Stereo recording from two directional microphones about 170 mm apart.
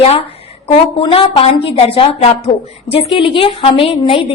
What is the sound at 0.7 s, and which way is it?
A woman's voice, 35° left (ahead or behind).